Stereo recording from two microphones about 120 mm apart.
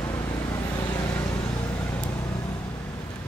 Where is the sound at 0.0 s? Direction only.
20° left (ahead or behind).